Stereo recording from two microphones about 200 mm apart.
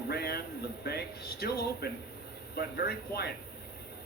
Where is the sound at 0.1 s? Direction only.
50° left (ahead or behind).